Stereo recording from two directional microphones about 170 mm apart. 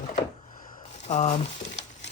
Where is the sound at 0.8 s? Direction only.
40° left (ahead or behind).